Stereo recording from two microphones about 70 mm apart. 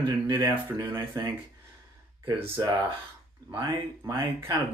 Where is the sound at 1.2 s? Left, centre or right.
Right.